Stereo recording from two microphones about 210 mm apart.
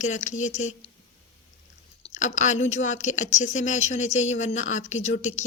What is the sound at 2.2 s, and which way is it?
A woman's voice, 35° left (ahead or behind).